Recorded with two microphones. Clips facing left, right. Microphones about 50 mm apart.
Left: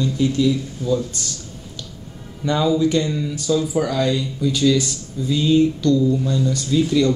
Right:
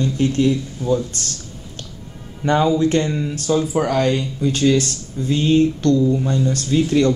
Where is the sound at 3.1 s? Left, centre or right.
Right.